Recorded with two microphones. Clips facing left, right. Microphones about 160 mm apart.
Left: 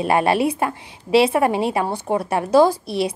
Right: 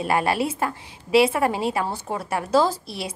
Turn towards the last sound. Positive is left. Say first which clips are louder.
# left 7 dB
turn(degrees=20)  # may be behind; listen again after turning